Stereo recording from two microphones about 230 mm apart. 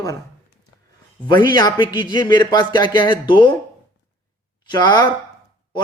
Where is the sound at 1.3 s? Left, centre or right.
Centre.